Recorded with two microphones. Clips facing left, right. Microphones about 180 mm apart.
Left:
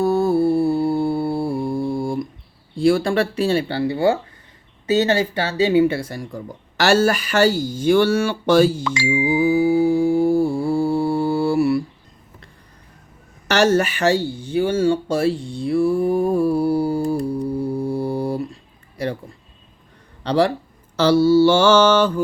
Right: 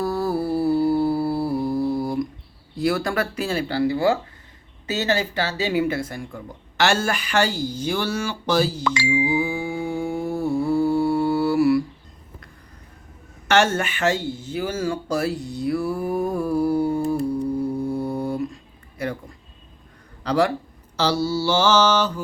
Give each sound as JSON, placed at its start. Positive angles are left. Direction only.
{"t": 0.0, "sound": "humming", "side_deg": 25}
{"t": 2.7, "sound": "speech", "side_deg": 30}
{"t": 9.3, "sound": "mantra", "side_deg": 40}
{"t": 13.5, "sound": "speech", "side_deg": 35}
{"t": 17.6, "sound": "mantra", "side_deg": 30}
{"t": 20.2, "sound": "speech", "side_deg": 30}
{"t": 20.9, "sound": "mantra", "side_deg": 55}